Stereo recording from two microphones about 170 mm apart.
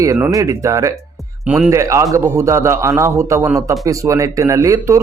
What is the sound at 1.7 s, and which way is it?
A man's voice, 15° right (ahead or behind).